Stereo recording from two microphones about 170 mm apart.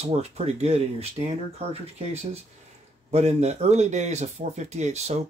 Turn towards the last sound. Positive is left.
turn(degrees=-40)  # may be behind; listen again after turning